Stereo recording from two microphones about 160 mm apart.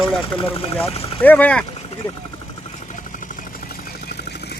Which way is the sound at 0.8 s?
40° left (ahead or behind).